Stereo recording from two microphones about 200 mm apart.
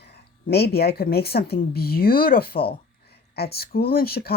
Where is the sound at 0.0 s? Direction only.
55° left (ahead or behind).